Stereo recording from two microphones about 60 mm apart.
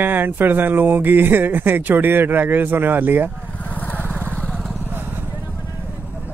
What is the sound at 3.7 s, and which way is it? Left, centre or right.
Vehicle, left.